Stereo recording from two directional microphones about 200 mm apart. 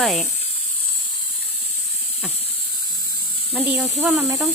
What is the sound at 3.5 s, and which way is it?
Speech, 5° right (ahead or behind).